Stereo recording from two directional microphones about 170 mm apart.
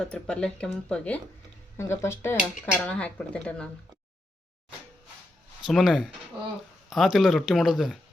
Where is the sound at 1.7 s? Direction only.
15° left (ahead or behind).